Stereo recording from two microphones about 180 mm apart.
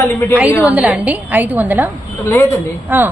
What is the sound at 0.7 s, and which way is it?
A woman's voice, 10° right (ahead or behind).